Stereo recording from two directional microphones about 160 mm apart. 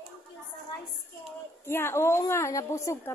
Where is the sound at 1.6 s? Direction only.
15° left (ahead or behind).